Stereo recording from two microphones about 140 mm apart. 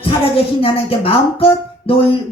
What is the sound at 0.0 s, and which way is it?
Music, 40° left (ahead or behind).